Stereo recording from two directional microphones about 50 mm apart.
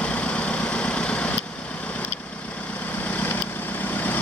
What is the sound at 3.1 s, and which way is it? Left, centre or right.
Vehicle, left.